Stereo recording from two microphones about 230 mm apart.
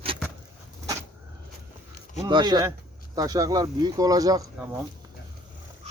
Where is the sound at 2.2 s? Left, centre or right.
Centre.